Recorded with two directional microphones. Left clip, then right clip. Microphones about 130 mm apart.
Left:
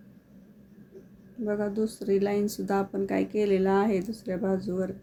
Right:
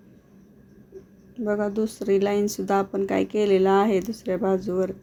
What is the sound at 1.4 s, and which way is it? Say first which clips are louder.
Speech: right 4 dB; 15° right (ahead or behind).